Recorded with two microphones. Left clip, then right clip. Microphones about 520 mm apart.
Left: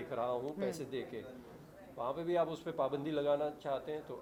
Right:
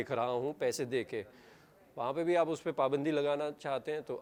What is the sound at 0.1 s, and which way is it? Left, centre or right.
A man's voice, right.